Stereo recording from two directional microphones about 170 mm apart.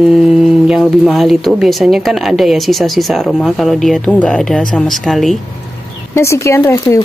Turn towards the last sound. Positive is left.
turn(degrees=15)  # may be behind; listen again after turning